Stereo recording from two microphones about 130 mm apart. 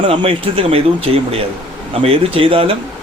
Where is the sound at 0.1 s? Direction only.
45° right (ahead or behind).